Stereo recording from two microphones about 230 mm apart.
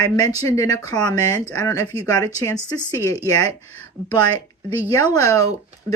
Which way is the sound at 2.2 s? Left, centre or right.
Centre.